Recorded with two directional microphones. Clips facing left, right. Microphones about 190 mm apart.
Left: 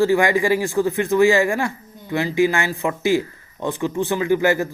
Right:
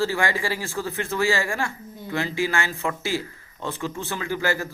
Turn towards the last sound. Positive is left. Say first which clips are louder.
# left 8 dB
turn(degrees=20)  # may be behind; listen again after turning